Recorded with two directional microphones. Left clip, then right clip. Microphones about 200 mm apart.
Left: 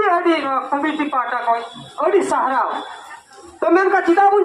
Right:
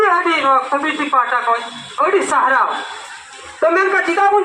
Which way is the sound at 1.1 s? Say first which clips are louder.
Right 8 dB; 40° left (ahead or behind).